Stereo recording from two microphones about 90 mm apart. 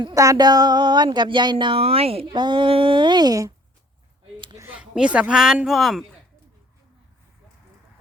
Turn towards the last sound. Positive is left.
turn(degrees=0)  # may be behind; listen again after turning